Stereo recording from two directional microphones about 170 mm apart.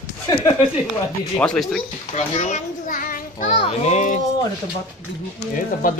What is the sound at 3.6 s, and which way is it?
Speech, 40° left (ahead or behind).